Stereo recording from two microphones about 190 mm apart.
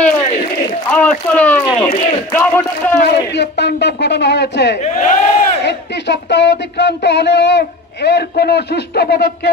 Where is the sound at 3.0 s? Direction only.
60° left (ahead or behind).